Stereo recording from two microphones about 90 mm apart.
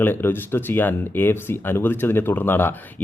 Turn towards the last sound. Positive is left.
turn(degrees=25)  # may be behind; listen again after turning